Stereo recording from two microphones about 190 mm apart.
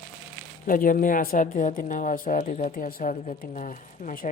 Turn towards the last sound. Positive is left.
turn(degrees=45)  # may be behind; listen again after turning